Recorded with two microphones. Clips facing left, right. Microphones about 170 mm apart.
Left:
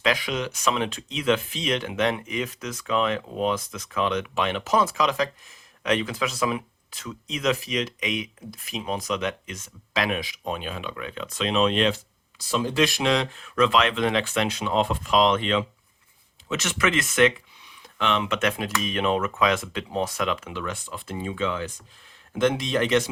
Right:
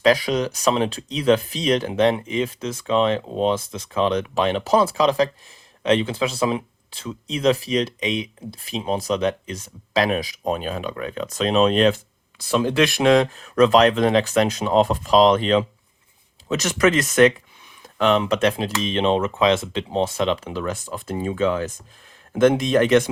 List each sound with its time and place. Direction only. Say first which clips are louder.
0.0 s speech: right 7 dB; 35° right (ahead or behind)
12.4 s speech: right 4 dB; 60° right (ahead or behind)